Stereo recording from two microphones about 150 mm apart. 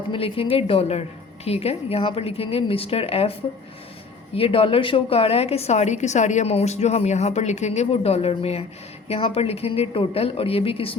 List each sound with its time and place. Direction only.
0.1 s a woman's voice: 35° left (ahead or behind)
4.4 s a woman's voice: 40° left (ahead or behind)